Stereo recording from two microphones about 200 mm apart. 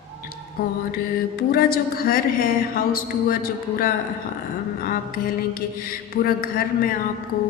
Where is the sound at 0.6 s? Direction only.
45° left (ahead or behind).